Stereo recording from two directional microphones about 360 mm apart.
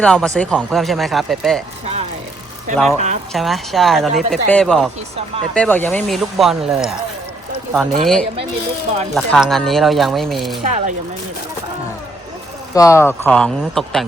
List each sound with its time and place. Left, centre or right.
0.0 s speech: centre
2.7 s speech: centre
10.6 s speech: centre
12.7 s speech: centre